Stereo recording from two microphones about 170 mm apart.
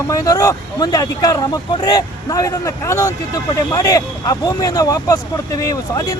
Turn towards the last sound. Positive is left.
turn(degrees=20)  # may be behind; listen again after turning